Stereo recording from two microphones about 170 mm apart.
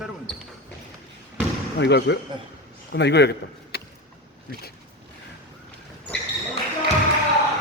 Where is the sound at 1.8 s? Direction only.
85° left.